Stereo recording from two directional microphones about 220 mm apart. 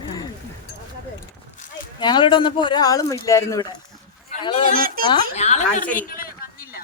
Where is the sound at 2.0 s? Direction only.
20° left (ahead or behind).